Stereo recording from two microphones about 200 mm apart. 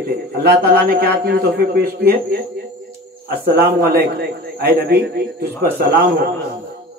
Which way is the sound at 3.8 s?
50° right (ahead or behind).